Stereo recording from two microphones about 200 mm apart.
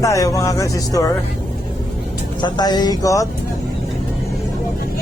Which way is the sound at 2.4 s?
20° left (ahead or behind).